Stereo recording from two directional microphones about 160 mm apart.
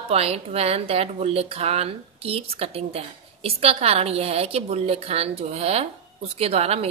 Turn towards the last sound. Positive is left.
turn(degrees=-40)  # may be behind; listen again after turning